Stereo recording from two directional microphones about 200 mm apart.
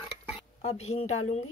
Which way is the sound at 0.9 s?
35° left (ahead or behind).